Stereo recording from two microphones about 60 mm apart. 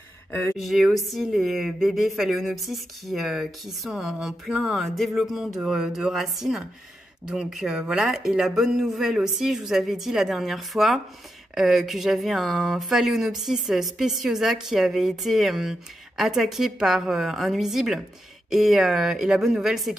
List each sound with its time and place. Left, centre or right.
0.3 s speech: left
0.6 s speech: centre